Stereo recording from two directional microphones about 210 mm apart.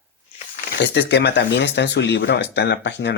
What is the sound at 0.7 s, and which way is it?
Speech, 55° left (ahead or behind).